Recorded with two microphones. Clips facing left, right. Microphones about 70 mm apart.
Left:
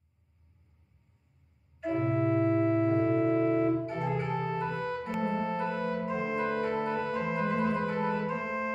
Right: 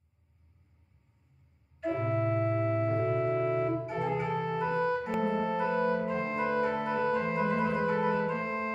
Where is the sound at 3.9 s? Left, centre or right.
Centre.